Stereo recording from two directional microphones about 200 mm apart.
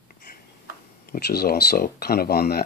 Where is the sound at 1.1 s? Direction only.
55° left (ahead or behind).